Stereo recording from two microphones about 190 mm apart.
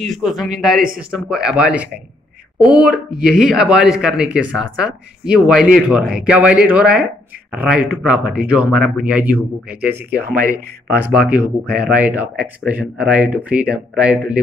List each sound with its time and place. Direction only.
0.0 s speech: centre (ahead or behind)
10.2 s speech: 50° right (ahead or behind)
11.1 s speech: 10° right (ahead or behind)